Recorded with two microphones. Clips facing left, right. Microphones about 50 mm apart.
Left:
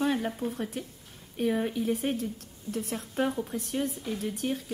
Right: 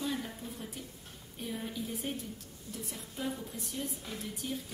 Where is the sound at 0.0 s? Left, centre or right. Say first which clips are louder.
Left 9 dB; left.